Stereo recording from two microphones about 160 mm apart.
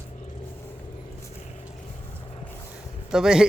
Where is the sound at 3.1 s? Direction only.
5° right (ahead or behind).